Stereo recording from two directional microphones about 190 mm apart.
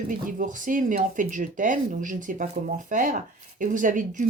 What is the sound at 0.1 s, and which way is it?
Speech, 45° right (ahead or behind).